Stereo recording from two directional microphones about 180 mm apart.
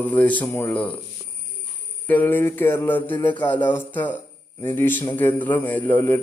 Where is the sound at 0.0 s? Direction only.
10° left (ahead or behind).